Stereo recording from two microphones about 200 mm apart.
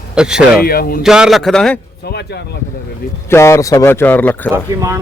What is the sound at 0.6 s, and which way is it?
Speech, 50° left (ahead or behind).